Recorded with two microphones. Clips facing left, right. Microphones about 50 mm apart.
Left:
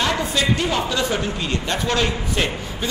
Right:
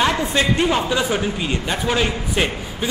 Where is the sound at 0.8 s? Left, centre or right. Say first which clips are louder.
Right 2 dB; centre.